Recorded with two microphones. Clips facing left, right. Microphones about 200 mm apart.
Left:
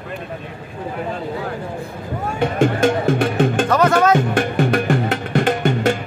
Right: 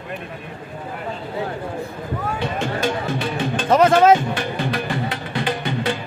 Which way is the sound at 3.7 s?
25° right (ahead or behind).